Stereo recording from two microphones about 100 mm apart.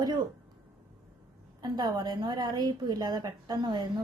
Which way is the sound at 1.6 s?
45° right (ahead or behind).